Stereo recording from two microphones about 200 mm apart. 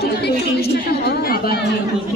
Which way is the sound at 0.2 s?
50° left (ahead or behind).